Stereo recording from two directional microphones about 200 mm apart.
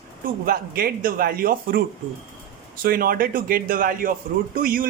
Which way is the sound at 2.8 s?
45° right (ahead or behind).